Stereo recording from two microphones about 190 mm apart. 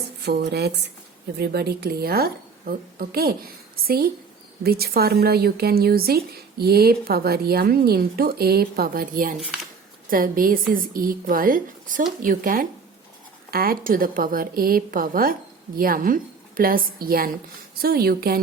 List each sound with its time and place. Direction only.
0.2 s a woman's voice: 60° right (ahead or behind)